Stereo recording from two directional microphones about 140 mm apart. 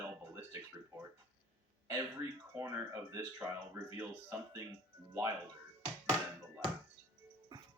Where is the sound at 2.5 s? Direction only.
20° right (ahead or behind).